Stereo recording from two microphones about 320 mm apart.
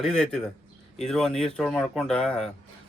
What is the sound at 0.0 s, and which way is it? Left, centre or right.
Speech, centre.